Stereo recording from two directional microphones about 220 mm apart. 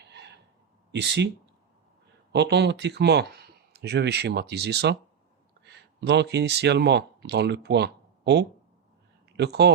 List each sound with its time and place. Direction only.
0.0 s gasp: 50° right (ahead or behind)
0.9 s speech: 50° right (ahead or behind)
2.3 s speech: 50° right (ahead or behind)
6.1 s speech: 50° right (ahead or behind)